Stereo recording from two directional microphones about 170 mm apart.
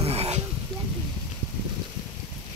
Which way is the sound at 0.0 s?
35° right (ahead or behind).